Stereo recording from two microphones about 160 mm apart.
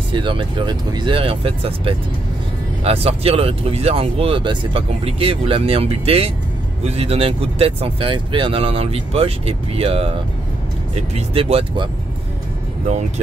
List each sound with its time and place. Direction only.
0.1 s speech: 30° right (ahead or behind)